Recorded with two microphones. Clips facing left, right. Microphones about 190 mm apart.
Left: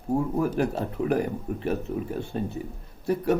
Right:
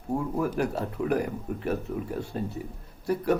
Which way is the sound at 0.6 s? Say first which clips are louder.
Left 2 dB; 30° left (ahead or behind).